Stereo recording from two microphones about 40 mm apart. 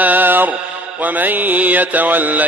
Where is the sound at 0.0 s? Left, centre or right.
Right.